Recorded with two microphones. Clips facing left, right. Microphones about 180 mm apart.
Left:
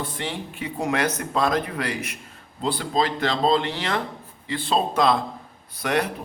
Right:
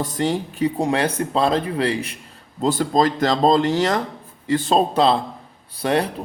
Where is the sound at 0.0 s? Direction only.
40° right (ahead or behind).